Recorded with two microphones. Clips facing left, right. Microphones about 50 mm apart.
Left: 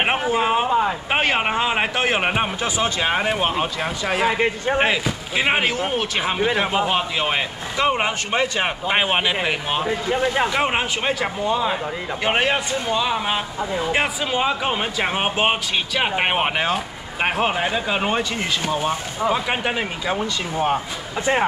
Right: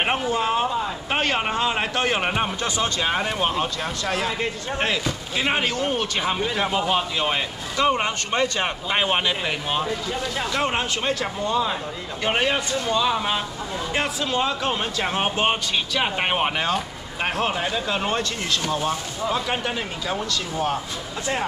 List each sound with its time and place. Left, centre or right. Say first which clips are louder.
0.0 s speech: left 3 dB; centre
0.7 s a sound: left 6 dB; left
1.1 s speech: left 2 dB; centre
4.4 s speech: left 6 dB; left
4.8 s speech: left 3 dB; centre
6.3 s speech: left 6 dB; centre
9.8 s speech: left 6 dB; left
10.6 s speech: left 3 dB; centre